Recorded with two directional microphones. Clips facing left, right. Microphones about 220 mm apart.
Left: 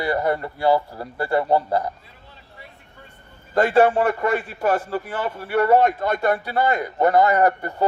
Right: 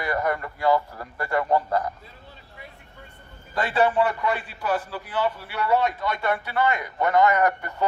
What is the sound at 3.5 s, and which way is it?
A man's voice, 50° left (ahead or behind).